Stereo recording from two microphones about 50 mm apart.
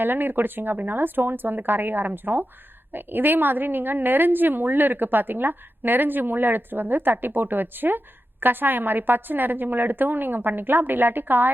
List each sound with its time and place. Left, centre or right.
0.0 s a woman's voice: right